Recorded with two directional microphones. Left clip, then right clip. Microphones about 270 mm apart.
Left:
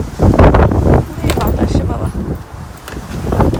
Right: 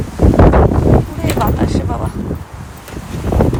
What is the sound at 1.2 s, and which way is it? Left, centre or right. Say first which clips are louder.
Vehicle: even; centre.